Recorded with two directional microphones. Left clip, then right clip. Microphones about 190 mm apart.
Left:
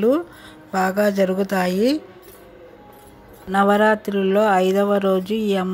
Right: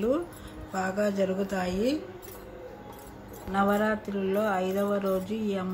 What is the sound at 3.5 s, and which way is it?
Speech, 45° left (ahead or behind).